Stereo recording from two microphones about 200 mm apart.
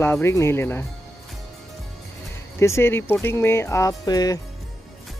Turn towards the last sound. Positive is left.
turn(degrees=20)  # may be behind; listen again after turning